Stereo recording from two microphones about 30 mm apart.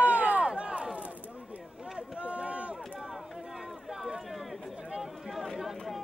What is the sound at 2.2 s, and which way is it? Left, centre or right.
Run, right.